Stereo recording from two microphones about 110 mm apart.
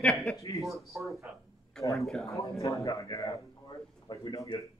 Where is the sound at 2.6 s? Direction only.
30° left (ahead or behind).